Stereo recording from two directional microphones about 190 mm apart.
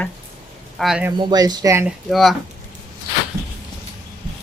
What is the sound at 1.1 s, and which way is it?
Speech, 20° right (ahead or behind).